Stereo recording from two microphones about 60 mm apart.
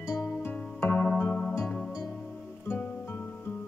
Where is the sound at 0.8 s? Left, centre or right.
Left.